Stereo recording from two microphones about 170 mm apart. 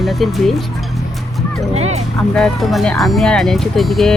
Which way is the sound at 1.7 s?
40° right (ahead or behind).